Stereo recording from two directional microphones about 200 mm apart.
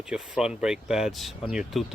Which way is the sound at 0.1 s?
5° right (ahead or behind).